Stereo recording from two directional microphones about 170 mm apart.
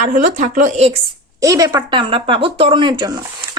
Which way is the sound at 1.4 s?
20° right (ahead or behind).